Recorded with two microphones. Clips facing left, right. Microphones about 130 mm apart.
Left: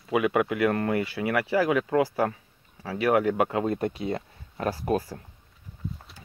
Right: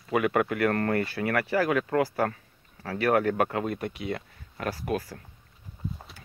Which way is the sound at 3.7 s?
30° left (ahead or behind).